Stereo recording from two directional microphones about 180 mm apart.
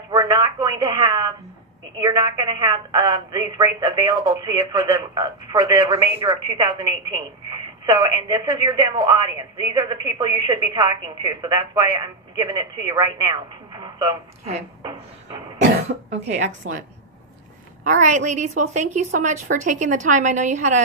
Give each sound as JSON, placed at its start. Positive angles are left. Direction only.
{"t": 0.1, "sound": "telephone", "side_deg": -25}
{"t": 2.0, "sound": "a woman's voice", "side_deg": -25}
{"t": 15.9, "sound": "speech", "side_deg": -65}
{"t": 16.7, "sound": "a woman's voice", "side_deg": -90}
{"t": 18.0, "sound": "a woman's voice", "side_deg": -45}